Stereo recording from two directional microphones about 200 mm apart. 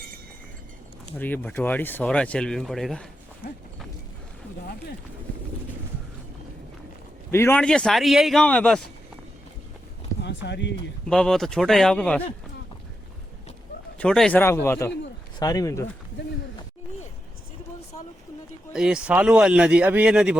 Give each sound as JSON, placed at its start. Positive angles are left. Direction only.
{"t": 1.1, "sound": "speech", "side_deg": 10}
{"t": 7.3, "sound": "speech", "side_deg": 10}
{"t": 10.2, "sound": "speech", "side_deg": 60}
{"t": 11.0, "sound": "speech", "side_deg": 5}
{"t": 14.0, "sound": "speech", "side_deg": 5}
{"t": 18.7, "sound": "speech", "side_deg": -5}